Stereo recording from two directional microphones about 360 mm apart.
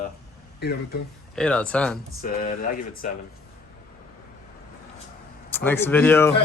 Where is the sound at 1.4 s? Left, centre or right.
Centre.